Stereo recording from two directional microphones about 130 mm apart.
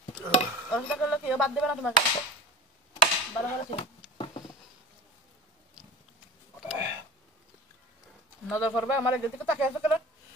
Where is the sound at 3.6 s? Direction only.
45° left (ahead or behind).